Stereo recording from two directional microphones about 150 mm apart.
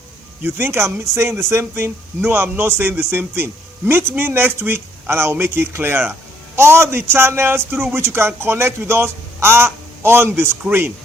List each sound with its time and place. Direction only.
0.4 s speech: 15° right (ahead or behind)